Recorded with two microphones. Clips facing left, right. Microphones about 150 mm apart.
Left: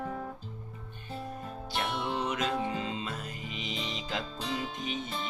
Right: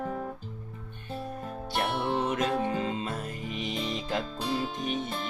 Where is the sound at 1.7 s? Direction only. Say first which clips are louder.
Right 4 dB; 50° right (ahead or behind).